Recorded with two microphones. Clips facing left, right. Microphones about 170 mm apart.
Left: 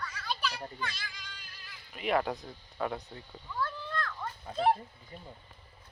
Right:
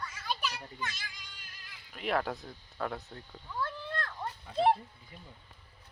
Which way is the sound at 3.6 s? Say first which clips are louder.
Left 1 dB; 30° right (ahead or behind).